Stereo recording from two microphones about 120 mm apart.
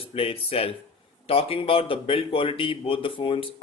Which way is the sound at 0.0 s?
55° left (ahead or behind).